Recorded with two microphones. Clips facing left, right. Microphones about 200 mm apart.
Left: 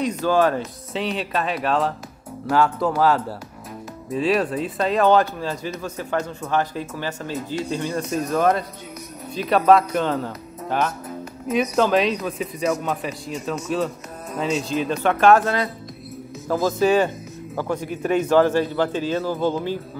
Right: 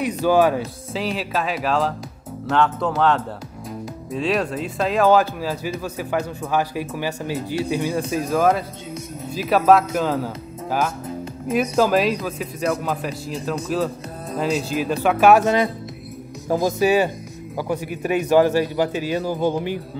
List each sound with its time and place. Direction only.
0.0 s a man's voice: 10° right (ahead or behind)
14.7 s a man's voice: 5° right (ahead or behind)
15.4 s a man's voice: 20° right (ahead or behind)